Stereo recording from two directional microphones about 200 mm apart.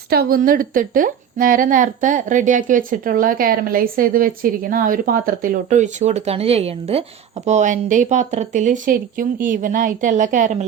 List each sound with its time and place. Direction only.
0.1 s a woman's voice: 45° right (ahead or behind)